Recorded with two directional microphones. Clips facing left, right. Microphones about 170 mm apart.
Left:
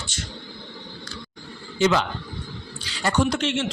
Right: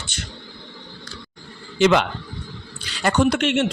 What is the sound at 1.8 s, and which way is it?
A man's voice, 65° right (ahead or behind).